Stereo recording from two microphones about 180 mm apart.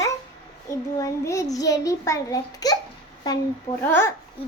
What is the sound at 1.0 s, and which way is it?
A child's voice, 20° left (ahead or behind).